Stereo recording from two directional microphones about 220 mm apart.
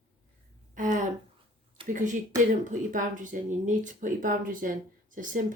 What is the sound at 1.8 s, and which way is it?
Speech, 35° right (ahead or behind).